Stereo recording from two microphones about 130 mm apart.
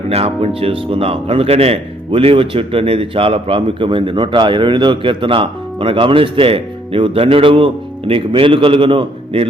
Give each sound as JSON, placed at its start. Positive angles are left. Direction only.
{"t": 0.1, "sound": "speech", "side_deg": -50}